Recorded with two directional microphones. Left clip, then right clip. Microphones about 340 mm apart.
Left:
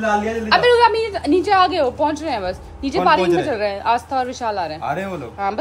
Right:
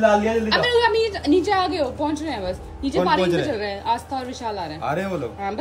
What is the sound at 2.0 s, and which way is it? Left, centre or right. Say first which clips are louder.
Speech: left 5 dB; centre.